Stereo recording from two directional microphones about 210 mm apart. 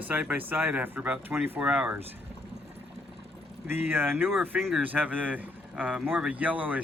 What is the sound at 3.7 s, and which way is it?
Speech, 10° right (ahead or behind).